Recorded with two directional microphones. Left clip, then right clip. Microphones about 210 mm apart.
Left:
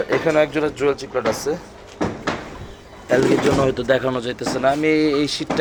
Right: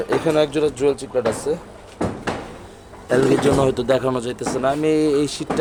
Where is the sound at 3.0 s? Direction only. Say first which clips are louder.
Even; 20° right (ahead or behind).